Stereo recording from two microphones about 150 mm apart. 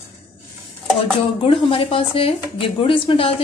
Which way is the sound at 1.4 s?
40° left (ahead or behind).